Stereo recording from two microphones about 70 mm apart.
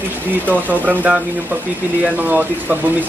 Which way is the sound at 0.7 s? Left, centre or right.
Right.